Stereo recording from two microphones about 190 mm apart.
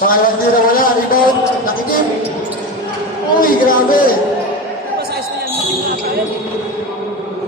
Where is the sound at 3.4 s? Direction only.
45° left (ahead or behind).